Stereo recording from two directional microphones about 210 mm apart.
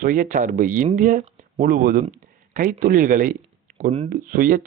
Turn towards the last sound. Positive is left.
turn(degrees=-40)  # may be behind; listen again after turning